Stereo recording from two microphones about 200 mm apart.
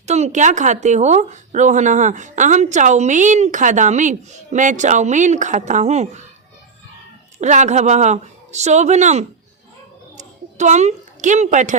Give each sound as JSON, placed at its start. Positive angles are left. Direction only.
{"t": 0.0, "sound": "speech", "side_deg": -35}
{"t": 7.3, "sound": "speech", "side_deg": -35}
{"t": 10.2, "sound": "a sound", "side_deg": -35}